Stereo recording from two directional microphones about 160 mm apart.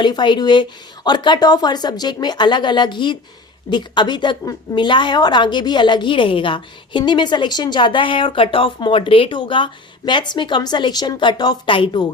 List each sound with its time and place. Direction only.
0.0 s a woman's voice: 30° left (ahead or behind)